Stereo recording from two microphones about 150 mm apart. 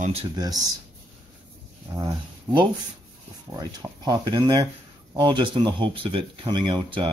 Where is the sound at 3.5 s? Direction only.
25° right (ahead or behind).